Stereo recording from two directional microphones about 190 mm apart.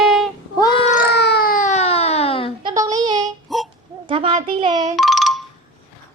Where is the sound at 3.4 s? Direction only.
Centre (ahead or behind).